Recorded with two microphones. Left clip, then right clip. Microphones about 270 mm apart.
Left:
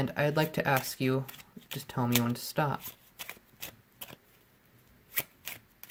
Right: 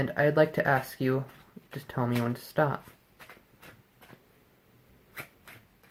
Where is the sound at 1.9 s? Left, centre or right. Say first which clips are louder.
Even; left.